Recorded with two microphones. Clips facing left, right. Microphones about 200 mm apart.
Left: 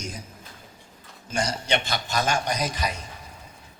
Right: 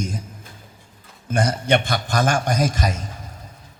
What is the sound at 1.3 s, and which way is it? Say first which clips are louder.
A man's voice: right 6 dB; 55° right (ahead or behind).